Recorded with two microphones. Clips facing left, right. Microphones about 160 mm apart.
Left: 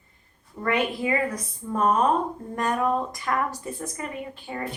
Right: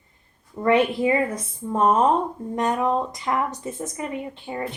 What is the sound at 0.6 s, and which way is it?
Speech, 25° right (ahead or behind).